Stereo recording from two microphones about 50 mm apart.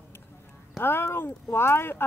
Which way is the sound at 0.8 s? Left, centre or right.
Left.